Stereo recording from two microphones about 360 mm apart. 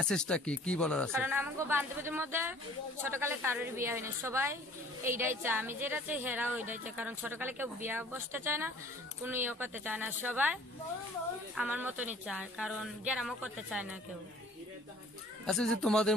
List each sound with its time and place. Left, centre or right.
0.0 s a woman's voice: centre
15.4 s a woman's voice: centre